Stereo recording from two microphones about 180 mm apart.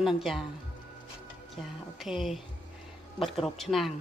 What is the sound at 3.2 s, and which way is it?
Speech, 30° left (ahead or behind).